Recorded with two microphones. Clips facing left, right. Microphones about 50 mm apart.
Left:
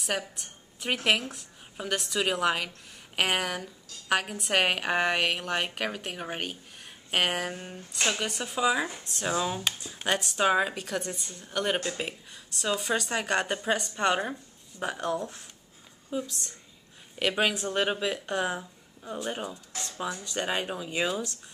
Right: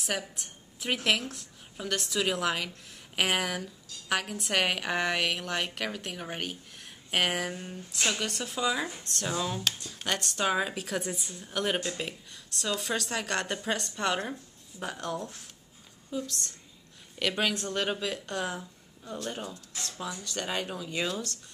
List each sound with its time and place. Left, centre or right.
0.0 s a woman's voice: centre
7.1 s a sound: centre
7.5 s speech: centre
7.9 s a woman's voice: centre
11.8 s a woman's voice: centre
20.0 s a woman's voice: centre